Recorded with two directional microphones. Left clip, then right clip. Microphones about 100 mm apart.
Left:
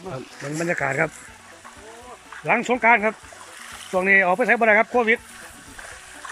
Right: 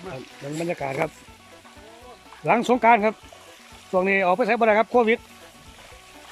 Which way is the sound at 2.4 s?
35° right (ahead or behind).